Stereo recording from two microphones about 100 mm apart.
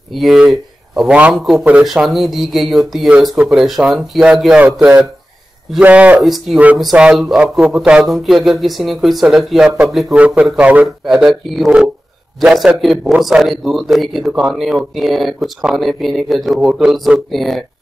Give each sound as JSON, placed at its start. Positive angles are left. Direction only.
{"t": 0.1, "sound": "speech", "side_deg": 0}
{"t": 5.8, "sound": "speech", "side_deg": -15}
{"t": 6.2, "sound": "speech", "side_deg": 0}
{"t": 10.1, "sound": "speech", "side_deg": -15}